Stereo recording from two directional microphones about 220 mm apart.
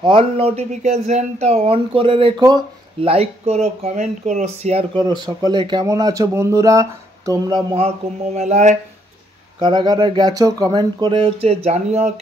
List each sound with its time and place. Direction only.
0.0 s speech: 25° right (ahead or behind)
9.6 s speech: 20° right (ahead or behind)